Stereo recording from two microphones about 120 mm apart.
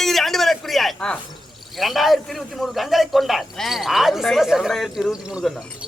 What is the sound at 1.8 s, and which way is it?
A man's voice, centre (ahead or behind).